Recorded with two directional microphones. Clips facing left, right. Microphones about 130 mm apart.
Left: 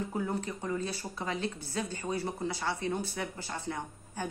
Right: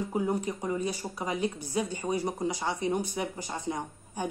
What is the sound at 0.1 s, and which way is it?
A woman's voice, 15° right (ahead or behind).